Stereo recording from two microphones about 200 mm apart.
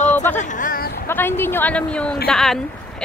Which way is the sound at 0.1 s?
10° left (ahead or behind).